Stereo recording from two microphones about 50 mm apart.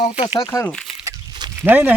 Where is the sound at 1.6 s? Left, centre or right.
Right.